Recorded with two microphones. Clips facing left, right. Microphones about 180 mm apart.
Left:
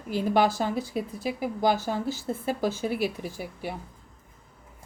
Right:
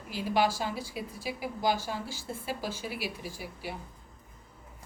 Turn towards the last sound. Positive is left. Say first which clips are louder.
# left 5 dB
turn(degrees=50)  # may be behind; listen again after turning